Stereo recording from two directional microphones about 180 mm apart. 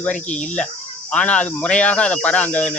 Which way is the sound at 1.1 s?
5° left (ahead or behind).